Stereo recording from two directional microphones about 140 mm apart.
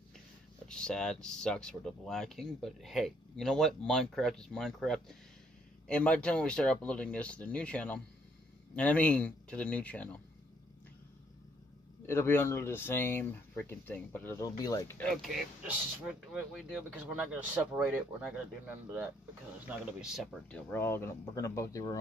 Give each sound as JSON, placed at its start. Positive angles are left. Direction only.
{"t": 0.7, "sound": "speech", "side_deg": 5}
{"t": 12.1, "sound": "speech", "side_deg": 20}
{"t": 15.0, "sound": "speech", "side_deg": 0}
{"t": 20.4, "sound": "speech", "side_deg": 10}